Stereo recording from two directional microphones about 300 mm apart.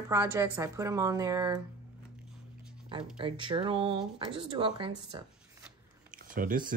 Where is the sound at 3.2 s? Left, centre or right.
Centre.